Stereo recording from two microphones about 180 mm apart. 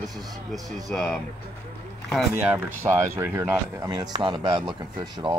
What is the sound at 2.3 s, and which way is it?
Speech, 10° right (ahead or behind).